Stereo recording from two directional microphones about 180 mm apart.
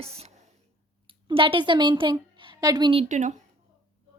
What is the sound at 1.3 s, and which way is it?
A woman's voice, 30° right (ahead or behind).